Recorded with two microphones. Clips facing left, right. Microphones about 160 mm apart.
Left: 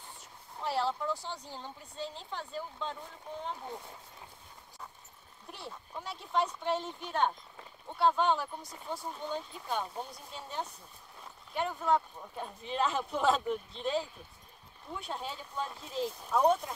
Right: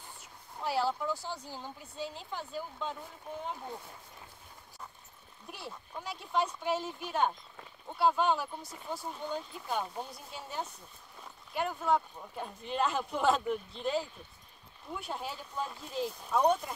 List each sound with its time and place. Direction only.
0.2 s speech: 5° right (ahead or behind)
5.5 s speech: centre (ahead or behind)